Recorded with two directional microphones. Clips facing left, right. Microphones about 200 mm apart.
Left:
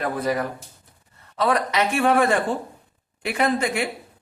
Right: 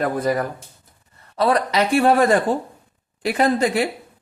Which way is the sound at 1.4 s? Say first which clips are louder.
Right 3 dB; 35° right (ahead or behind).